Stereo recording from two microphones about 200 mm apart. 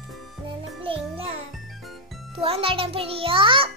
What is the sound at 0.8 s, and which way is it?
A child's voice, 25° right (ahead or behind).